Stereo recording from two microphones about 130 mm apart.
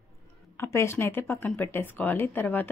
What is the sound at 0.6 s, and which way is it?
Speech, 20° left (ahead or behind).